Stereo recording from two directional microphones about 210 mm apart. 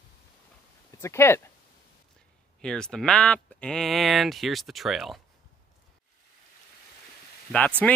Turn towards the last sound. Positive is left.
turn(degrees=5)  # may be behind; listen again after turning